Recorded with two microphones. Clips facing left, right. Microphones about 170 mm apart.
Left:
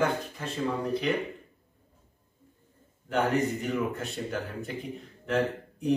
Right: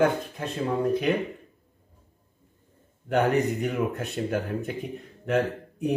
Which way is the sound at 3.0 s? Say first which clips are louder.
Right 4 dB; 60° right (ahead or behind).